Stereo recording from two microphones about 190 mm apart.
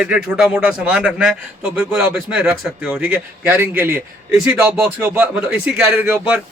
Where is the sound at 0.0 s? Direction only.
5° right (ahead or behind).